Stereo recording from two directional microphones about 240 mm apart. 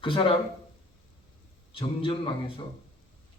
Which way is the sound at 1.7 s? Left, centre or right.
Left.